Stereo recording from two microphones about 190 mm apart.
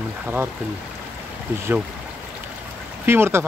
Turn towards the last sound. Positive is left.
turn(degrees=-10)  # may be behind; listen again after turning